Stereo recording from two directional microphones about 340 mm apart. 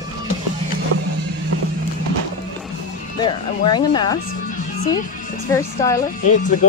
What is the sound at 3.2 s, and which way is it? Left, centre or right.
Speech, centre.